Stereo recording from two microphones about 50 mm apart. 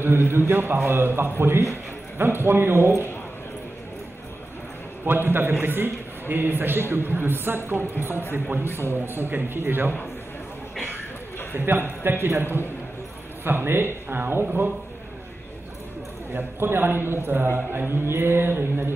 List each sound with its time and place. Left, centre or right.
0.0 s a man's voice: right
5.0 s a man's voice: right
11.5 s a man's voice: right
16.3 s a man's voice: right